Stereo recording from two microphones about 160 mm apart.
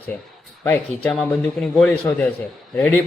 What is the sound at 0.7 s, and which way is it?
A man's voice, 10° left (ahead or behind).